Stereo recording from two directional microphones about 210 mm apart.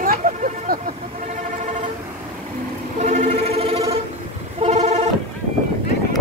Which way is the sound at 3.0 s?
35° right (ahead or behind).